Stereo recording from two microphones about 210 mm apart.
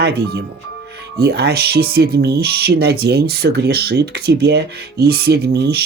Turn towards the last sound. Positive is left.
turn(degrees=-50)  # may be behind; listen again after turning